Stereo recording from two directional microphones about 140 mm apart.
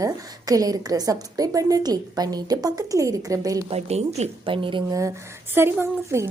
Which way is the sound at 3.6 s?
50° right (ahead or behind).